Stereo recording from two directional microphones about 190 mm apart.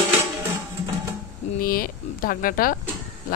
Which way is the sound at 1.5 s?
50° left (ahead or behind).